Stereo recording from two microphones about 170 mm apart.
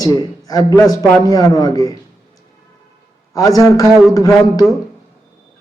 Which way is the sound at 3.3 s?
20° left (ahead or behind).